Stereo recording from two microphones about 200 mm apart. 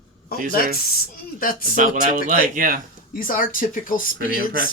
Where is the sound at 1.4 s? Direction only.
45° left (ahead or behind).